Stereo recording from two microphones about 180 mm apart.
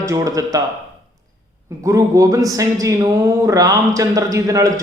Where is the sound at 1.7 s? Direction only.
20° right (ahead or behind).